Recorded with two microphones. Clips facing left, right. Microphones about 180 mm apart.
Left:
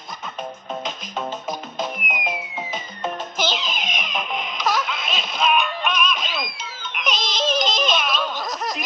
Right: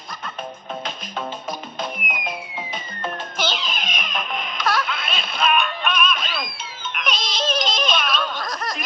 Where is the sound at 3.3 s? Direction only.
Centre (ahead or behind).